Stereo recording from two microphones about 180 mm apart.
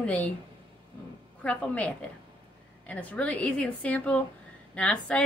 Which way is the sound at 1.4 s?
5° left (ahead or behind).